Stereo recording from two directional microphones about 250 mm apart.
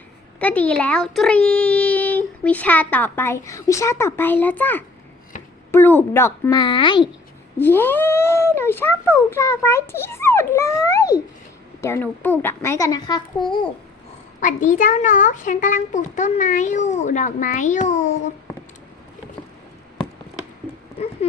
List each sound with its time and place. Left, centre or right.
0.3 s a child's voice: centre
7.6 s a child's voice: centre
14.4 s a child's voice: left